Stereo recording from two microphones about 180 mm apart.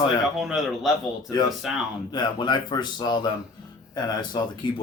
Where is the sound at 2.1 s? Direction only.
25° left (ahead or behind).